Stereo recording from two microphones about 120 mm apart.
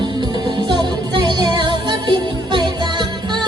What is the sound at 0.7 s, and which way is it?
Music, 40° right (ahead or behind).